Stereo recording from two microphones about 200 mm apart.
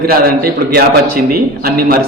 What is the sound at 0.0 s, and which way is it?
A man's voice, 50° right (ahead or behind).